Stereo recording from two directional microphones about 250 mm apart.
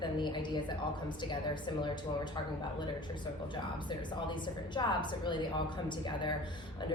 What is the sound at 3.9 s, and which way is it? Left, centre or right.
A woman's voice, centre.